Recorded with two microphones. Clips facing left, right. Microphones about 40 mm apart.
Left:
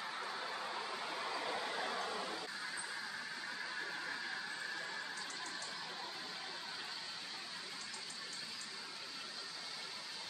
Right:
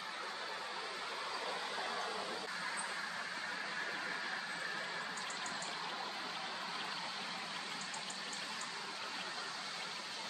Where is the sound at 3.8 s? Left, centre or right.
Right.